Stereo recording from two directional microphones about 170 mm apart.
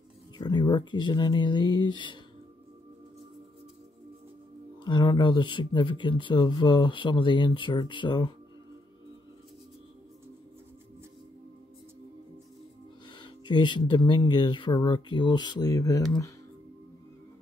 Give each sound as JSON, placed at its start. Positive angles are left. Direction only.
{"t": 0.4, "sound": "speech", "side_deg": 25}
{"t": 4.8, "sound": "speech", "side_deg": 25}
{"t": 13.2, "sound": "speech", "side_deg": 25}